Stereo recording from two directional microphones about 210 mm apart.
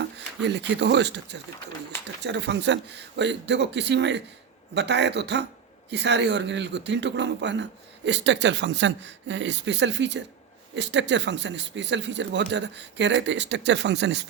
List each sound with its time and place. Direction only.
0.0 s speech: 55° right (ahead or behind)